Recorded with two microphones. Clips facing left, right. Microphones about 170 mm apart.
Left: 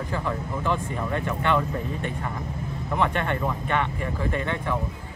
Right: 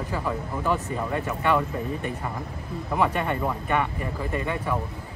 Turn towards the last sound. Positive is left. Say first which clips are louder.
# even
turn(degrees=-10)  # may be behind; listen again after turning